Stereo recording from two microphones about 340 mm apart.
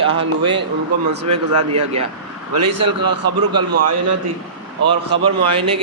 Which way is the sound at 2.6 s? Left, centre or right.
Right.